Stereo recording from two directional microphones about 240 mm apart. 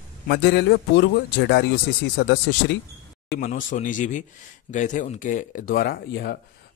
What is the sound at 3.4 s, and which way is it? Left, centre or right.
A man's voice, left.